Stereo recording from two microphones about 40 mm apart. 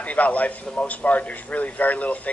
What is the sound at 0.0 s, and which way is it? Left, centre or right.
A man's voice, left.